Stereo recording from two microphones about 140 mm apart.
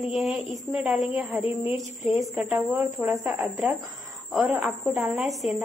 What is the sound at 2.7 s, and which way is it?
Speech, 20° right (ahead or behind).